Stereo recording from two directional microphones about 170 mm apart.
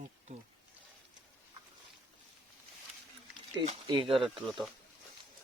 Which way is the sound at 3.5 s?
30° right (ahead or behind).